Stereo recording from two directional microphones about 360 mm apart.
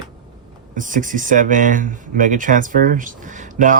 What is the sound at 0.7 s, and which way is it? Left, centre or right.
Speech, right.